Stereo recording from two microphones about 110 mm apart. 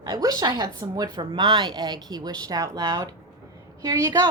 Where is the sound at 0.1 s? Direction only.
35° right (ahead or behind).